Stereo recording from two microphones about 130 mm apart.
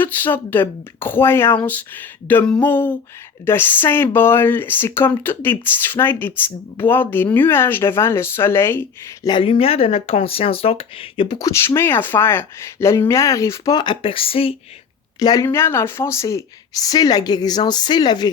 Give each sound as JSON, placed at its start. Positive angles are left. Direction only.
{"t": 0.0, "sound": "speech", "side_deg": 15}
{"t": 9.2, "sound": "speech", "side_deg": 40}
{"t": 11.3, "sound": "speech", "side_deg": 25}
{"t": 15.2, "sound": "speech", "side_deg": 30}
{"t": 15.4, "sound": "speech", "side_deg": 20}